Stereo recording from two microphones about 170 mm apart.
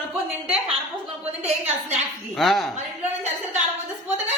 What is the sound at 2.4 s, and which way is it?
Speech, centre (ahead or behind).